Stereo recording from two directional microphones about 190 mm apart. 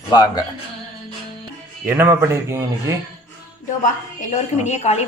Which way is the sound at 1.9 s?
15° right (ahead or behind).